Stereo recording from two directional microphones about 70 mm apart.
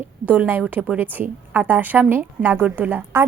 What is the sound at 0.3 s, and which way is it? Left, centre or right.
A woman's voice, right.